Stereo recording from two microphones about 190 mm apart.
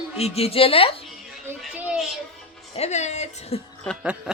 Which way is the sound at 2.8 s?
35° left (ahead or behind).